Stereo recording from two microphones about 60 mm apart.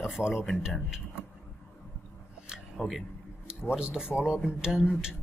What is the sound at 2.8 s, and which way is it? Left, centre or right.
Speech, centre.